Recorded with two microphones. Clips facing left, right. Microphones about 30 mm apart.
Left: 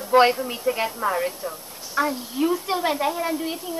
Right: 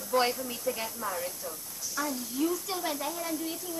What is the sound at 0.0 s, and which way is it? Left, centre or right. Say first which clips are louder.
Speech: left 11 dB; left.